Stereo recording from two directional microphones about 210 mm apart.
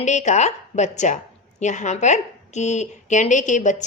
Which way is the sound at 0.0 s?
35° left (ahead or behind).